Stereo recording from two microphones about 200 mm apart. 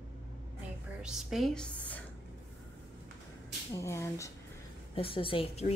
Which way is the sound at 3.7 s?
15° left (ahead or behind).